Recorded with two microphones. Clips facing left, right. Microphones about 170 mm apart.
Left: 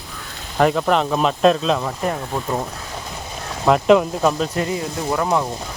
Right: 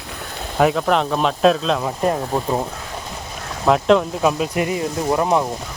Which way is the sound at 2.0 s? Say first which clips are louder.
Right 4 dB; 25° right (ahead or behind).